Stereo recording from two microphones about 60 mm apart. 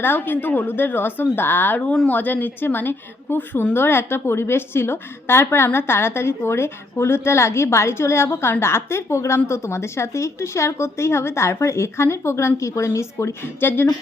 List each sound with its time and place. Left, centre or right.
0.0 s a woman's voice: left